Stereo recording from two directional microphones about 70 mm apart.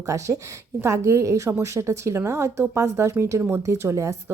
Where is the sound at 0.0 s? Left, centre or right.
Right.